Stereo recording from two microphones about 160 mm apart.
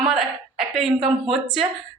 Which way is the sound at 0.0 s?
Centre (ahead or behind).